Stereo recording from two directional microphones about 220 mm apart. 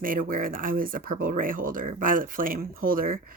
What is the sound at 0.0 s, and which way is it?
Speech, 40° right (ahead or behind).